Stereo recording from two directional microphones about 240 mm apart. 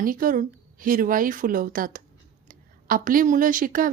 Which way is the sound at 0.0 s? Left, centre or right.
Right.